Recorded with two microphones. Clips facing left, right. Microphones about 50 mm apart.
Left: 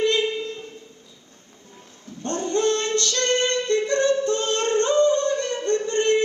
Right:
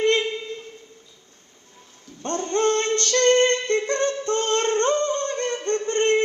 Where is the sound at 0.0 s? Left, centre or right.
Right.